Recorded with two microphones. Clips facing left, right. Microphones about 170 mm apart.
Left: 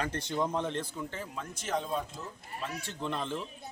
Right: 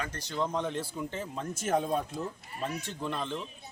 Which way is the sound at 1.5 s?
50° right (ahead or behind).